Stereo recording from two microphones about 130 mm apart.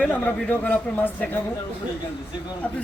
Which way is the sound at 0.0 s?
15° left (ahead or behind).